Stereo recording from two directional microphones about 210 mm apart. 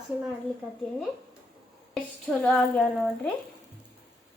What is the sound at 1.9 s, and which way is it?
A child's voice, centre (ahead or behind).